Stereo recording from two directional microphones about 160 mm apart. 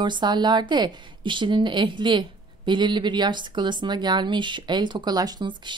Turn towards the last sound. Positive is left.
turn(degrees=-25)  # may be behind; listen again after turning